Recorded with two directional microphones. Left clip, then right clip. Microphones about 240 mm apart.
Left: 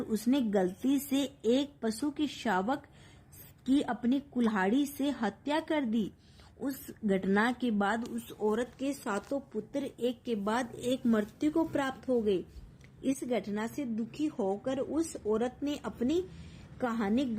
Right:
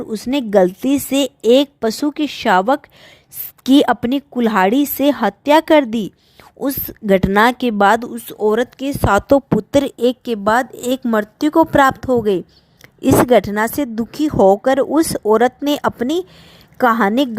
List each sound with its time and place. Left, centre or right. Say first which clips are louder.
0.0 s a woman's voice: right 10 dB; right